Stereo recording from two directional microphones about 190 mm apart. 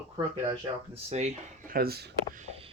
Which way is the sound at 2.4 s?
30° right (ahead or behind).